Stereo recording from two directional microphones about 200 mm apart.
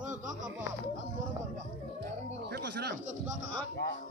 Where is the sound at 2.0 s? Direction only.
55° right (ahead or behind).